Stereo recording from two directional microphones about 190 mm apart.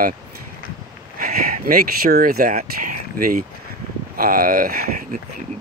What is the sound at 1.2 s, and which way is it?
Speech, 50° right (ahead or behind).